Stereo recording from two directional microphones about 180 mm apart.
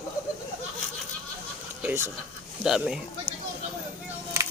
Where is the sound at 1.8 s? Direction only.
10° right (ahead or behind).